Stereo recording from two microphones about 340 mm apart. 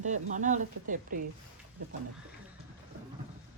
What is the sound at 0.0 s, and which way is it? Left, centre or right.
Speech, right.